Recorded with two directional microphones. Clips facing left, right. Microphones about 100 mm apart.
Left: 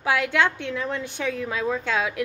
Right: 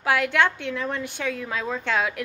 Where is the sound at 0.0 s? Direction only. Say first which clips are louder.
Right 1 dB; 15° left (ahead or behind).